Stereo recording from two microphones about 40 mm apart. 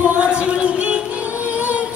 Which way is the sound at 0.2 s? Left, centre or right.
Right.